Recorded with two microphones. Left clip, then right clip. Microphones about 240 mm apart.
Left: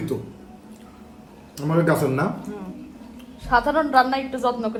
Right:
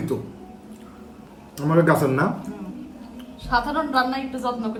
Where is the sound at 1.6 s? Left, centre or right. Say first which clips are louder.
Right 2 dB; centre.